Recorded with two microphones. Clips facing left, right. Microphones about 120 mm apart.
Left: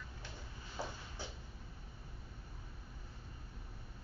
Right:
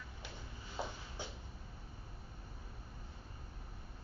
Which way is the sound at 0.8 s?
20° right (ahead or behind).